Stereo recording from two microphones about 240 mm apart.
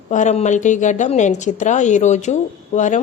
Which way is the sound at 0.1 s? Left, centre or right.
Left.